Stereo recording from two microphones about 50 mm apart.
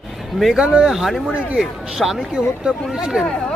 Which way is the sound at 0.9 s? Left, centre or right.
Centre.